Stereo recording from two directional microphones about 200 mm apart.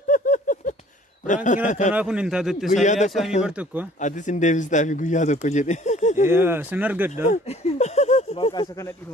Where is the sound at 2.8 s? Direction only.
35° left (ahead or behind).